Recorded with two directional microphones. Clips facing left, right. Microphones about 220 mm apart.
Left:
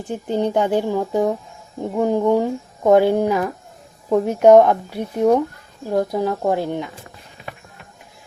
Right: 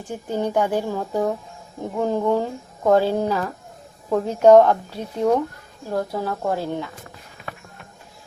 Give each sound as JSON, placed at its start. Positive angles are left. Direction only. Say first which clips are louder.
{"t": 0.1, "sound": "speech", "louder": "left 3 dB", "side_deg": 20}